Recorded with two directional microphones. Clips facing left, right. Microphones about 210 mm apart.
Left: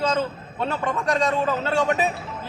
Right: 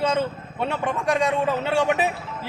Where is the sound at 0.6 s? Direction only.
15° right (ahead or behind).